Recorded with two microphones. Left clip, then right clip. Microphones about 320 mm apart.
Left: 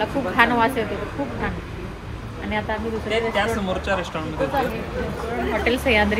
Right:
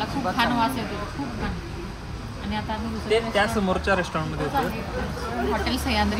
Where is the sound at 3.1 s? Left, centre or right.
Right.